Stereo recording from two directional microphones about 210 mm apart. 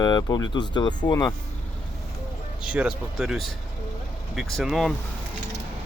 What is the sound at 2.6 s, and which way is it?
Speech, 5° right (ahead or behind).